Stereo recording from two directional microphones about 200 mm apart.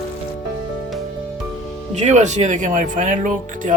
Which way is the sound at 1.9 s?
35° right (ahead or behind).